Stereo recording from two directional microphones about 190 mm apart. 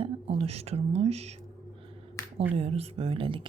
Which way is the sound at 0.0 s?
30° right (ahead or behind).